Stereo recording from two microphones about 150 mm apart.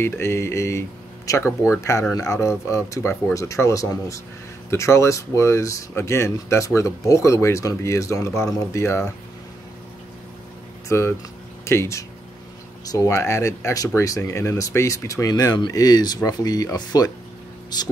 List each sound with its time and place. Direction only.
0.0 s speech: 15° left (ahead or behind)
10.9 s speech: 20° left (ahead or behind)